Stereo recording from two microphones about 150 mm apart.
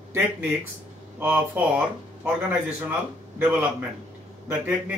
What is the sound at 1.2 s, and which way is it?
Speech, 10° right (ahead or behind).